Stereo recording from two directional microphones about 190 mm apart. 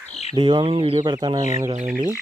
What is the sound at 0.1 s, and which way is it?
Bird, 35° left (ahead or behind).